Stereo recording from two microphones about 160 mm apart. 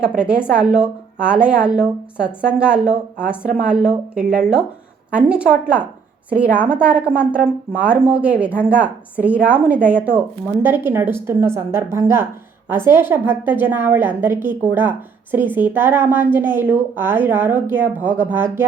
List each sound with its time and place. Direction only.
0.0 s speech: 5° right (ahead or behind)